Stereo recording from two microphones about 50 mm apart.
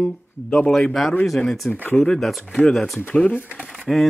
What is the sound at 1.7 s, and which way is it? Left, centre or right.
Speech, left.